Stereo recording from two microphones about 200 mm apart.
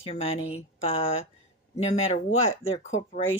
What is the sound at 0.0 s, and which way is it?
Speech, 30° left (ahead or behind).